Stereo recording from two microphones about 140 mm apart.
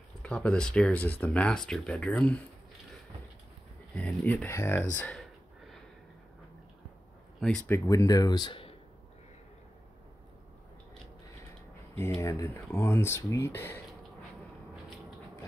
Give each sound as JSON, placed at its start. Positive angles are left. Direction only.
{"t": 0.2, "sound": "speech", "side_deg": 10}
{"t": 3.9, "sound": "speech", "side_deg": 10}
{"t": 7.3, "sound": "speech", "side_deg": 5}
{"t": 7.7, "sound": "speech", "side_deg": 20}
{"t": 11.9, "sound": "speech", "side_deg": 15}